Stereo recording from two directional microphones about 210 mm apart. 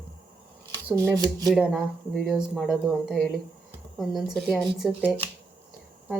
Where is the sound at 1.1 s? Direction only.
15° right (ahead or behind).